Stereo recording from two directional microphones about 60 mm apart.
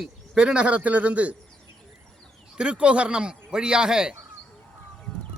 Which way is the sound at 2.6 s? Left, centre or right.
Centre.